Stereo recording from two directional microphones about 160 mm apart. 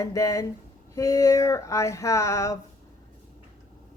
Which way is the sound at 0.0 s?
20° left (ahead or behind).